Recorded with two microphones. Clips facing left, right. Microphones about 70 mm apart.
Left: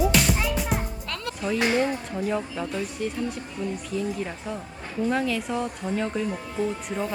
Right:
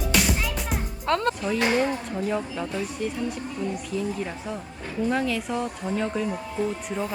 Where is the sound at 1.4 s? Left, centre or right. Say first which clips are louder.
Even; centre.